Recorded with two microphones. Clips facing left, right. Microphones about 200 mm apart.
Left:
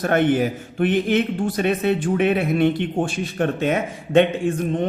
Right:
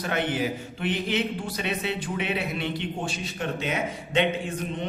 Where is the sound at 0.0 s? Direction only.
50° left (ahead or behind).